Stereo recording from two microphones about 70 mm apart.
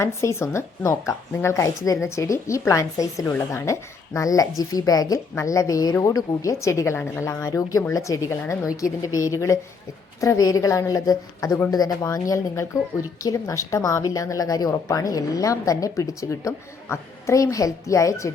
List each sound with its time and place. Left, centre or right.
0.0 s a woman's voice: left
7.7 s a woman's voice: left
12.0 s a woman's voice: left